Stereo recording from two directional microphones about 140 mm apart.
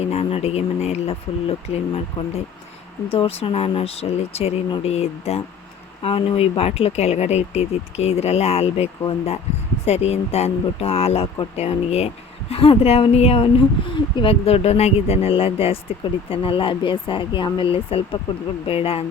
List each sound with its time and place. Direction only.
0.1 s speech: 45° left (ahead or behind)